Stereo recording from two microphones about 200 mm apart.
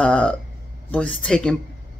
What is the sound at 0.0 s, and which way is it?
Speech, 5° left (ahead or behind).